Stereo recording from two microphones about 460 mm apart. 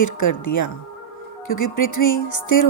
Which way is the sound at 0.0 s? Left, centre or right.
Left.